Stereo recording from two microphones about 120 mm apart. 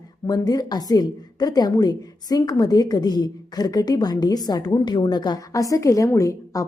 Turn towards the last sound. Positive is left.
turn(degrees=25)  # may be behind; listen again after turning